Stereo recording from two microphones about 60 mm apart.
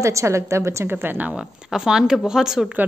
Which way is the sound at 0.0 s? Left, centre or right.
Right.